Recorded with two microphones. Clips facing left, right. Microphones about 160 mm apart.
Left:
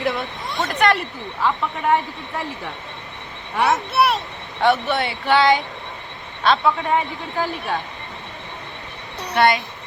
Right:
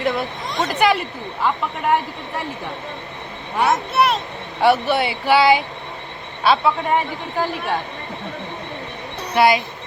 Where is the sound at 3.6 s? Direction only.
Centre (ahead or behind).